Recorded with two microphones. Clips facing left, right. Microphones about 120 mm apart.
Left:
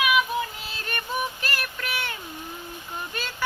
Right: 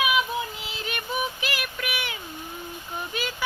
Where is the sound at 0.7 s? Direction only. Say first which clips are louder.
Even; 10° right (ahead or behind).